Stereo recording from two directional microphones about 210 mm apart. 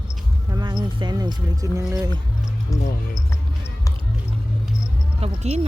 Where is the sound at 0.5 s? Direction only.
20° right (ahead or behind).